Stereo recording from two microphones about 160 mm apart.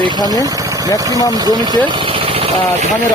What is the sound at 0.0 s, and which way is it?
Speech, 25° right (ahead or behind).